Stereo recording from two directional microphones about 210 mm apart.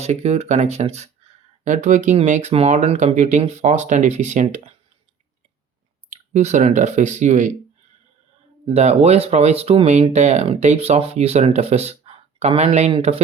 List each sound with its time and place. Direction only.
0.0 s speech: 30° right (ahead or behind)
6.1 s speech: 35° right (ahead or behind)
8.7 s speech: 30° right (ahead or behind)